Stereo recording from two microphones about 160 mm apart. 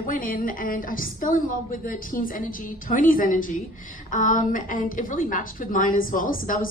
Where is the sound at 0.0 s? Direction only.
60° left (ahead or behind).